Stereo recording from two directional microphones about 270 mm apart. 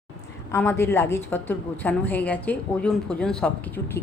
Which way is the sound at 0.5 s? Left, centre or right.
Centre.